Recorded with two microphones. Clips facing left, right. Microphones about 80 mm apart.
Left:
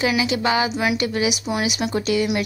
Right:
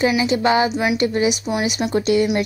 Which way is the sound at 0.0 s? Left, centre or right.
Right.